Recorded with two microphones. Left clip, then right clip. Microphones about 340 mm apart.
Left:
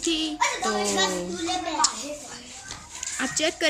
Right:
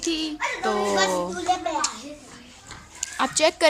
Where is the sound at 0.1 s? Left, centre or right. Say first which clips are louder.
Left 1 dB; centre.